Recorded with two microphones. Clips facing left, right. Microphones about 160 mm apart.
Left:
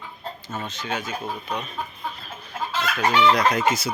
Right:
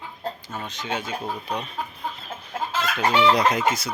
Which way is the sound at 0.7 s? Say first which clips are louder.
Right 2 dB; 20° right (ahead or behind).